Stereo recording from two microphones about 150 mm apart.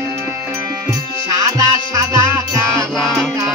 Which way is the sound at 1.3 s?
20° right (ahead or behind).